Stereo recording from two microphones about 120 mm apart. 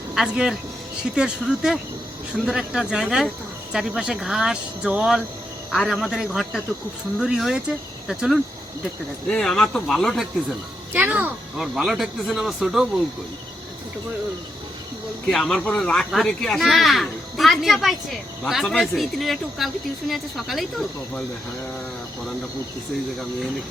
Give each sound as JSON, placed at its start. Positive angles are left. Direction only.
{"t": 0.1, "sound": "speech", "side_deg": -5}
{"t": 9.2, "sound": "speech", "side_deg": 5}
{"t": 10.9, "sound": "speech", "side_deg": -15}
{"t": 11.5, "sound": "speech", "side_deg": 0}
{"t": 15.3, "sound": "speech", "side_deg": 5}